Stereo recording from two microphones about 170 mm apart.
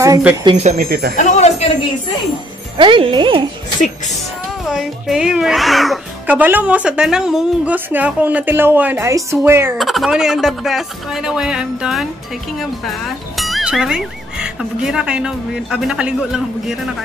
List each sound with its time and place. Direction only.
0.2 s a woman's voice: 15° right (ahead or behind)
0.6 s speech: 45° right (ahead or behind)
0.8 s speech: 65° right (ahead or behind)
1.1 s speech: 40° left (ahead or behind)
2.8 s speech: 30° right (ahead or behind)
4.6 s a woman's voice: centre (ahead or behind)
9.8 s speech: centre (ahead or behind)